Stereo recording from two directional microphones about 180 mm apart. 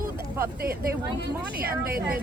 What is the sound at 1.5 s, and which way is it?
Speech, 55° right (ahead or behind).